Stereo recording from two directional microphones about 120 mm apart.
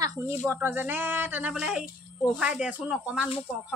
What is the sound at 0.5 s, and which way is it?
A child's voice, 20° right (ahead or behind).